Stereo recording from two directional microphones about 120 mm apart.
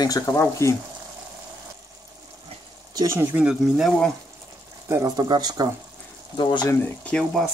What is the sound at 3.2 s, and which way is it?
Speech, 15° right (ahead or behind).